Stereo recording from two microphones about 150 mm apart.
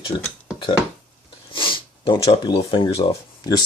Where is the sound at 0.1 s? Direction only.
40° left (ahead or behind).